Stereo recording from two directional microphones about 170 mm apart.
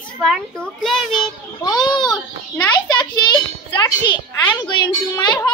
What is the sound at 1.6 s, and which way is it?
Speech, 25° left (ahead or behind).